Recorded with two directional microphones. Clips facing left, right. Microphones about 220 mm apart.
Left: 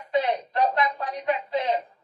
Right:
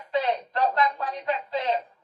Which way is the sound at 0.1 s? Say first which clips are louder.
Left 1 dB; 15° left (ahead or behind).